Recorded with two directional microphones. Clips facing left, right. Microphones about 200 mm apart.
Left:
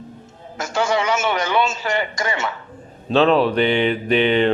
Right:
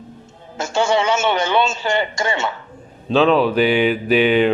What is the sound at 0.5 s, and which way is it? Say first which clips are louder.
A man's voice: right 3 dB; 25° right (ahead or behind).